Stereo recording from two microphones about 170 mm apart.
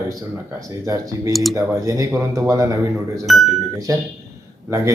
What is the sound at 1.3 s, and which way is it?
Speech, centre (ahead or behind).